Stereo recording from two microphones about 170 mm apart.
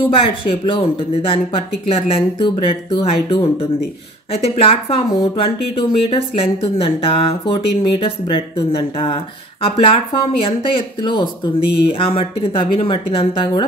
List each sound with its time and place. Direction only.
0.1 s speech: 30° left (ahead or behind)